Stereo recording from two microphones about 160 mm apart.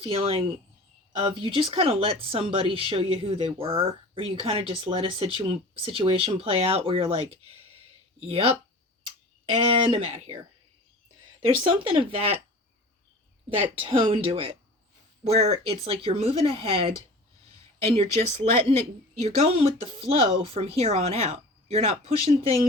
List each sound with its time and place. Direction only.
0.0 s speech: 35° right (ahead or behind)
9.6 s speech: 35° right (ahead or behind)
11.7 s speech: 30° right (ahead or behind)
13.6 s a woman's voice: 35° right (ahead or behind)